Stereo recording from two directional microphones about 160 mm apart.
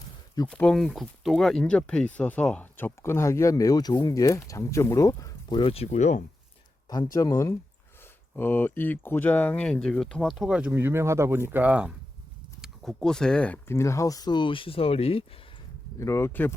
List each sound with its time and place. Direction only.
0.5 s speech: 5° left (ahead or behind)
5.5 s speech: 35° left (ahead or behind)
6.9 s speech: 25° left (ahead or behind)
16.0 s speech: 15° left (ahead or behind)